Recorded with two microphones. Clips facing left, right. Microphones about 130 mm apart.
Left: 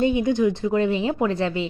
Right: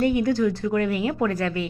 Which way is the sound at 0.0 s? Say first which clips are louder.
Left 1 dB; 20° left (ahead or behind).